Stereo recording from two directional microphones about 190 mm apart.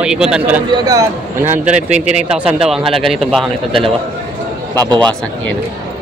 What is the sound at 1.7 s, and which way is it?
Speech, 40° right (ahead or behind).